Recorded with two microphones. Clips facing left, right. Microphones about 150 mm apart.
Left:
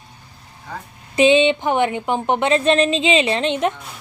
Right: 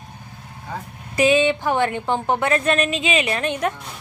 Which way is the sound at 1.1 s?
25° left (ahead or behind).